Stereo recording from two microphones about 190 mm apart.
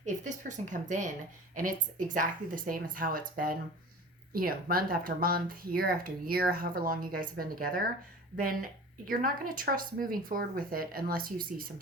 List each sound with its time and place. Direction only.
0.0 s speech: 40° right (ahead or behind)
9.0 s speech: 50° right (ahead or behind)